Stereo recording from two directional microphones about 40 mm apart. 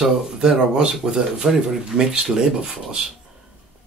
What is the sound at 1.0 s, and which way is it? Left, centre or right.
Speech, centre.